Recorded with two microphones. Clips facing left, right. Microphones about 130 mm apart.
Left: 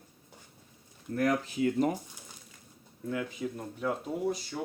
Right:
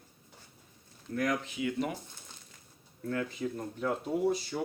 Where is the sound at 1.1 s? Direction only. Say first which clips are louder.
Left 3 dB; 40° left (ahead or behind).